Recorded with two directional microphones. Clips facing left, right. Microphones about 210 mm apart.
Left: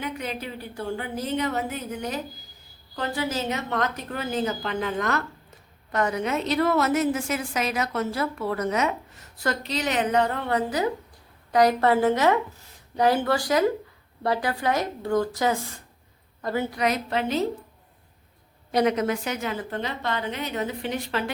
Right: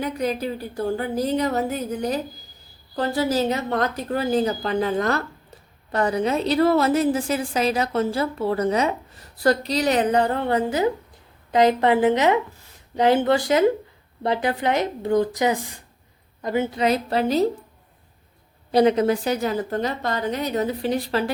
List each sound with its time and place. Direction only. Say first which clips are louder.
0.0 s a woman's voice: right 7 dB; 40° right (ahead or behind)
18.7 s a woman's voice: right 5 dB; 30° right (ahead or behind)